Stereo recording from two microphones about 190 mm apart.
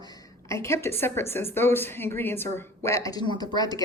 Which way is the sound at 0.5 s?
15° left (ahead or behind).